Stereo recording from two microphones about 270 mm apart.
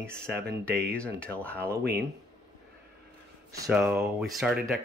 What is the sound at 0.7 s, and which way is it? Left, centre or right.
Speech, right.